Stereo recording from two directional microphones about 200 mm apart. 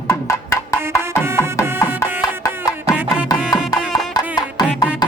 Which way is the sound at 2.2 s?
15° left (ahead or behind).